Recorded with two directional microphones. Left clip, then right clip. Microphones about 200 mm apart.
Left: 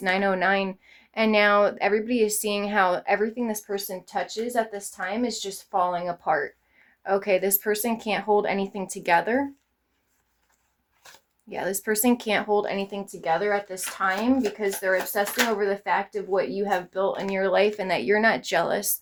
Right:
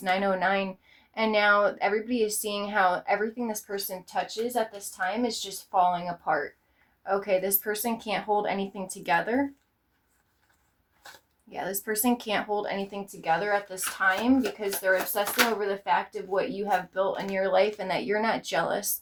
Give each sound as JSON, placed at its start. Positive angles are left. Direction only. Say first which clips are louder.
{"t": 0.0, "sound": "speech", "louder": "left 3 dB", "side_deg": 40}
{"t": 11.4, "sound": "speech", "louder": "left 5 dB", "side_deg": 40}